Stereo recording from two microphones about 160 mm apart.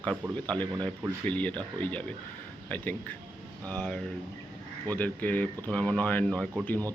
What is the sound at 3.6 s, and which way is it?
Speech, 5° left (ahead or behind).